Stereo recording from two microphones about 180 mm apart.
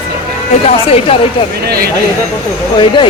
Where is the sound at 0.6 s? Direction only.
35° left (ahead or behind).